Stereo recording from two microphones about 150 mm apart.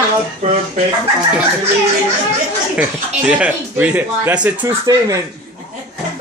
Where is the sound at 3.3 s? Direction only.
10° right (ahead or behind).